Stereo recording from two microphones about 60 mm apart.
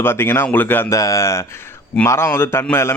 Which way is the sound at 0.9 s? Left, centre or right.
Left.